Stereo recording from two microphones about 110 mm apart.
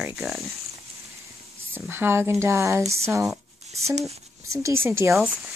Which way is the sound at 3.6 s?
80° right.